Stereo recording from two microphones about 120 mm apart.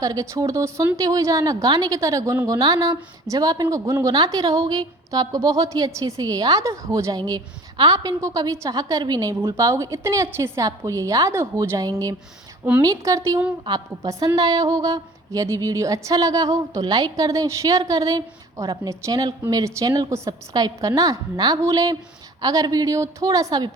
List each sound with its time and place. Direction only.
0.0 s a woman's voice: 30° right (ahead or behind)